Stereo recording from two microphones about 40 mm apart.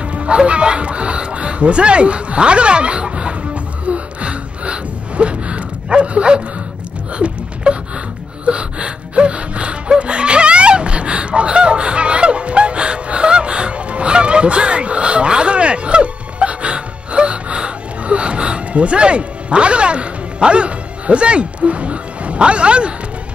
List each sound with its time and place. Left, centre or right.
0.0 s music: right
7.2 s a sound: right
8.5 s gasp: right